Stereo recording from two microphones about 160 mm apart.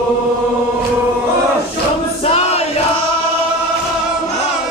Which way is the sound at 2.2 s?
40° left (ahead or behind).